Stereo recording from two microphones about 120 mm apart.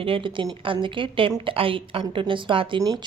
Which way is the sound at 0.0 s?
45° right (ahead or behind).